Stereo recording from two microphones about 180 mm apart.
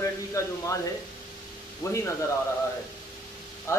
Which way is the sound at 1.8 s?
15° left (ahead or behind).